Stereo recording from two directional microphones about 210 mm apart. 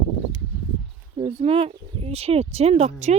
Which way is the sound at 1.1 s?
30° right (ahead or behind).